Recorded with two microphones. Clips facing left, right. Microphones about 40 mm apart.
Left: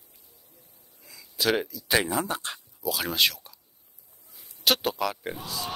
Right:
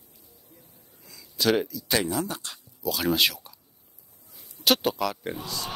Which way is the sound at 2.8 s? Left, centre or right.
Centre.